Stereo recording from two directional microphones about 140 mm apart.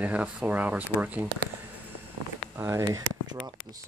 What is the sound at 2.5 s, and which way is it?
Speech, 20° right (ahead or behind).